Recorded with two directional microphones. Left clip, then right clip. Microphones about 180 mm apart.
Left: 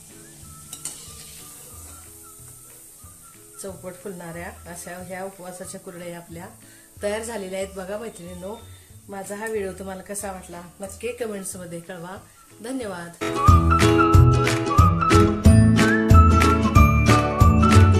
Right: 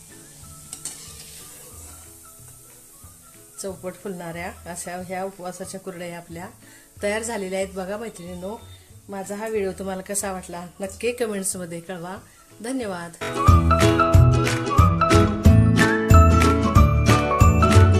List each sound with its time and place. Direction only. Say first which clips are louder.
3.6 s speech: right 3 dB; 35° right (ahead or behind)
10.2 s a woman's voice: right 4 dB; 50° right (ahead or behind); by 13.1 s 25° right (ahead or behind)
13.1 s music: left 2 dB; centre (ahead or behind)